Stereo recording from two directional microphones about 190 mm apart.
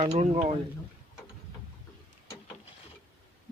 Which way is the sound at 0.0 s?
35° right (ahead or behind).